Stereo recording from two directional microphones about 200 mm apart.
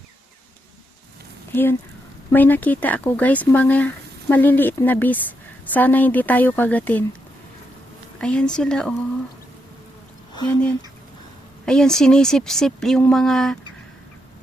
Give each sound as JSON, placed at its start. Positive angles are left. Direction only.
{"t": 2.3, "sound": "speech", "side_deg": 10}
{"t": 8.2, "sound": "speech", "side_deg": 5}
{"t": 10.4, "sound": "speech", "side_deg": 5}